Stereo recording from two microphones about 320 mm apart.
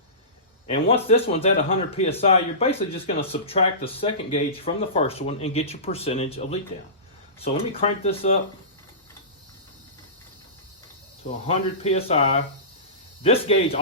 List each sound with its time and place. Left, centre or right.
0.7 s a man's voice: centre
11.8 s speech: centre